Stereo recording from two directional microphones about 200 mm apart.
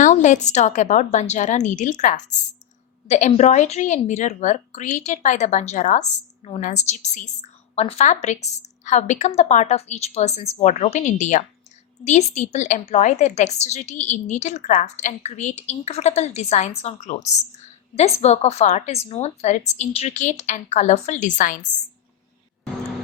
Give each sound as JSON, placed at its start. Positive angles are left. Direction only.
{"t": 0.0, "sound": "a woman's voice", "side_deg": 40}